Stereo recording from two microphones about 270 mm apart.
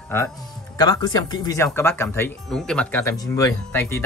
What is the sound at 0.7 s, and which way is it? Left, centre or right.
Speech, centre.